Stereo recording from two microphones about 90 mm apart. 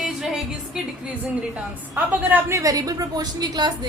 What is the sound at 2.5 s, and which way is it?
A woman's voice, 40° right (ahead or behind).